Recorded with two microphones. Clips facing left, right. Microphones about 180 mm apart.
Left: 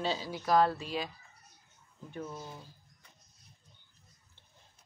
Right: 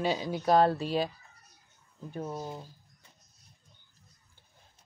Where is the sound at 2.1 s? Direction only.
40° right (ahead or behind).